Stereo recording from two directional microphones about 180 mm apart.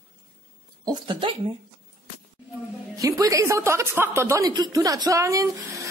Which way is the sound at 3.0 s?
20° right (ahead or behind).